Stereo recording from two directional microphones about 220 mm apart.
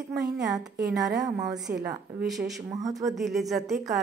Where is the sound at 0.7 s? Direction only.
50° right (ahead or behind).